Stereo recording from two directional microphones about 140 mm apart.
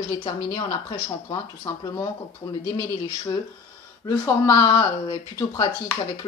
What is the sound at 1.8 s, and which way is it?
Speech, 25° left (ahead or behind).